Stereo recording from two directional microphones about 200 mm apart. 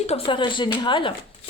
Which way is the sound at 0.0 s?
30° left (ahead or behind).